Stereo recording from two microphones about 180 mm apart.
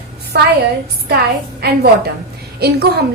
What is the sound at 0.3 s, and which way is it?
Speech, 65° right (ahead or behind).